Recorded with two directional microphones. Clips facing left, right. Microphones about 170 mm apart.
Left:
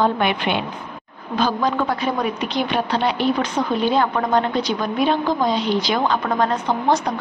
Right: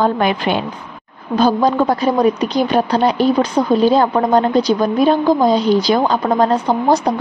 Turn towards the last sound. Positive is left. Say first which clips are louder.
# right 5 dB
turn(degrees=-35)  # may be behind; listen again after turning